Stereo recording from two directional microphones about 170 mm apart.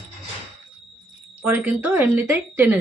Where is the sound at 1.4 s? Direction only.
10° right (ahead or behind).